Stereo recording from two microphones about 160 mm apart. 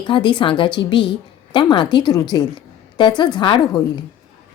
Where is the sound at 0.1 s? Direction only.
30° left (ahead or behind).